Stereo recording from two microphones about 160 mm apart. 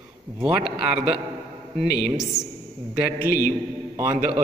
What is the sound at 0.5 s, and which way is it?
Speech, 80° left.